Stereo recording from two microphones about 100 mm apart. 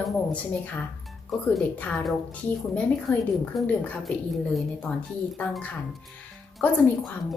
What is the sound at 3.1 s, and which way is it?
Speech, 20° left (ahead or behind).